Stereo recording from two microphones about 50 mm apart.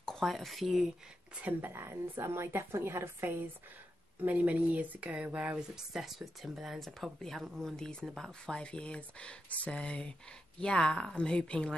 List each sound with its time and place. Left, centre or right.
0.0 s speech: centre
1.4 s a woman's voice: right
4.2 s speech: right
5.9 s speech: centre
6.8 s speech: centre
7.7 s speech: centre